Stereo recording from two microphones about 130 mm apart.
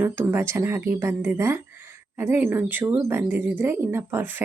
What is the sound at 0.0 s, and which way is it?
Speech, 15° right (ahead or behind).